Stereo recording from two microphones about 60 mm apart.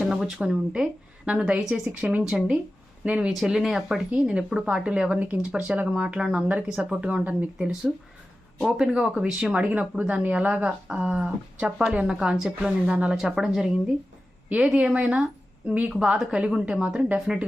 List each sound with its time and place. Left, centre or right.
0.0 s a sound: centre
0.4 s speech: centre
2.2 s speech: centre
3.3 s speech: centre; by 7.3 s right
7.6 s speech: centre